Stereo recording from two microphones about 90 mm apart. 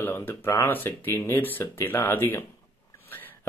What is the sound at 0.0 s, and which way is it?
Speech, 25° left (ahead or behind).